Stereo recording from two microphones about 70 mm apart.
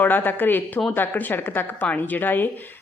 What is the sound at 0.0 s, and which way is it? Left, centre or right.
A woman's voice, left.